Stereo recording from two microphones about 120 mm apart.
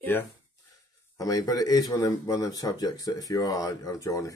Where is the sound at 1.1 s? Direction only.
30° left (ahead or behind).